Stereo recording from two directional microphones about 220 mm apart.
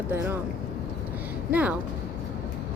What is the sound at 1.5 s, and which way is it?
Speech, 5° right (ahead or behind).